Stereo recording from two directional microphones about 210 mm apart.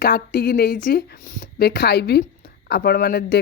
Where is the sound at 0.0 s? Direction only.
45° left (ahead or behind).